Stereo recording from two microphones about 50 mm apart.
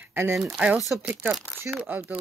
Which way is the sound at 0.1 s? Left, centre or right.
Right.